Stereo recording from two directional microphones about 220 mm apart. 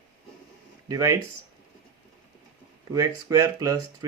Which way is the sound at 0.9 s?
15° right (ahead or behind).